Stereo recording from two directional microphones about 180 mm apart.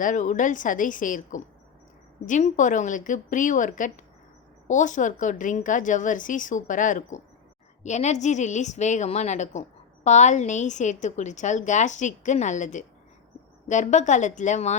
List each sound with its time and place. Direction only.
0.0 s a woman's voice: 45° left (ahead or behind)